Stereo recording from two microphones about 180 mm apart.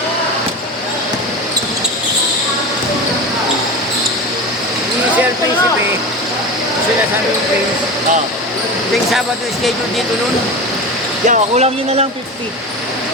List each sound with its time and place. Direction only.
11.3 s speech: 35° right (ahead or behind)